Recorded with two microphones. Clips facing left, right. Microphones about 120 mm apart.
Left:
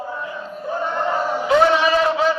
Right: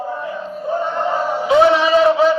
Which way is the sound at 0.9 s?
20° right (ahead or behind).